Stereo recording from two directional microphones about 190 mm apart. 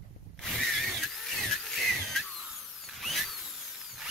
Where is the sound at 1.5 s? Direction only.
Centre (ahead or behind).